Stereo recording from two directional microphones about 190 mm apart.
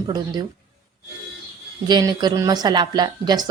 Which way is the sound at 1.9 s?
20° right (ahead or behind).